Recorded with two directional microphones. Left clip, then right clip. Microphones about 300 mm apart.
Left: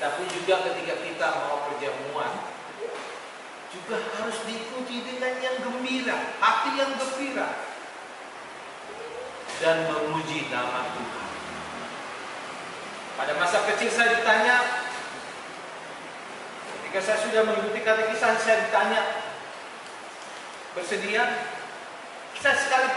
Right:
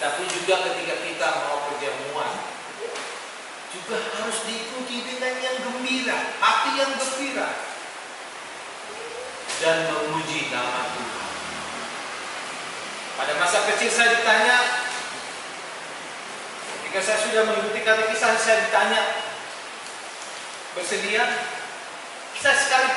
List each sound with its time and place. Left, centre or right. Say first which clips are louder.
0.2 s speech: right 2 dB; centre
1.4 s speech: right 2 dB; left
1.8 s speech: right 2 dB; centre
3.9 s speech: right 2 dB; centre
9.6 s speech: right 2 dB; centre
13.2 s a man's voice: right 2 dB; centre
16.9 s speech: right 2 dB; centre
20.9 s speech: right 2 dB; centre